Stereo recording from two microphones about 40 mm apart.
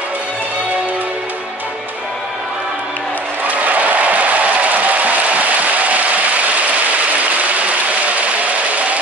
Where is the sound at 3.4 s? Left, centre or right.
Right.